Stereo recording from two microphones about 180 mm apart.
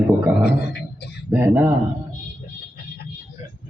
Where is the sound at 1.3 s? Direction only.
10° right (ahead or behind).